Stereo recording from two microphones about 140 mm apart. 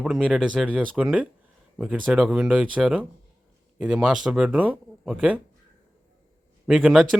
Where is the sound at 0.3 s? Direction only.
5° right (ahead or behind).